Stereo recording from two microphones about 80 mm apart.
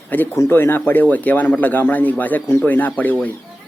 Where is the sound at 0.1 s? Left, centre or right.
Left.